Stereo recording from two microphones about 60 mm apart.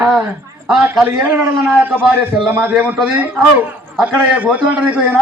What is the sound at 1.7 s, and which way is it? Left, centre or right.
A man's voice, right.